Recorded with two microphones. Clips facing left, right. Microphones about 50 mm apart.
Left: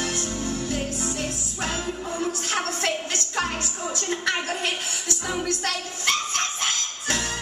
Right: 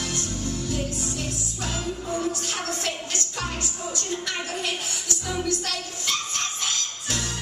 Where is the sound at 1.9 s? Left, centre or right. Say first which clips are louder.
Even; left.